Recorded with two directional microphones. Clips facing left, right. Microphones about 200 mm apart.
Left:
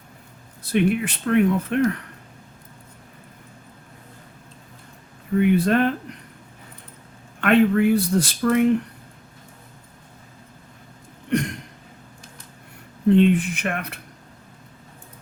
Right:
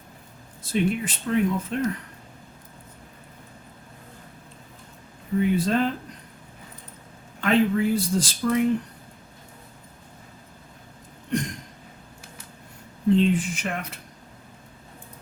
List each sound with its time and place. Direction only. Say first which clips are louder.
0.6 s speech: left 4 dB; 65° left (ahead or behind)
5.4 s speech: left 4 dB; 65° left (ahead or behind)
7.4 s speech: left 4 dB; 65° left (ahead or behind)
11.3 s a sound: left 4 dB; 65° left (ahead or behind)
13.1 s speech: left 4 dB; 60° left (ahead or behind)